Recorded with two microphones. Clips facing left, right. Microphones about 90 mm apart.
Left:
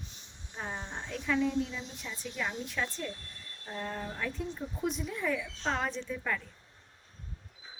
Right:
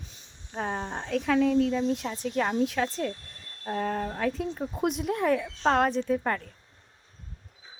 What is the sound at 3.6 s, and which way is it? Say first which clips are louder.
Speech: right 9 dB; 65° right (ahead or behind).